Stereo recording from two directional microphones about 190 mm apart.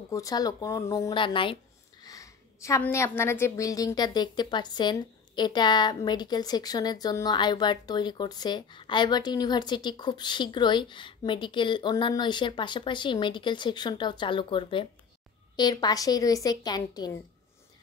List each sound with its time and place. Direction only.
0.1 s speech: 20° left (ahead or behind)